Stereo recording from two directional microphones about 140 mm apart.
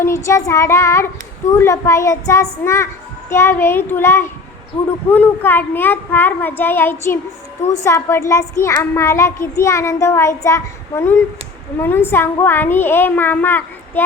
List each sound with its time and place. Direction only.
0.0 s a child's voice: 20° left (ahead or behind)